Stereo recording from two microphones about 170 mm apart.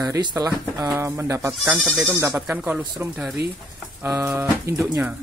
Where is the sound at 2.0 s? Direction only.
15° right (ahead or behind).